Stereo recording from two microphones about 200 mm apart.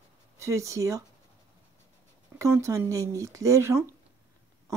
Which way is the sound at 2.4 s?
15° right (ahead or behind).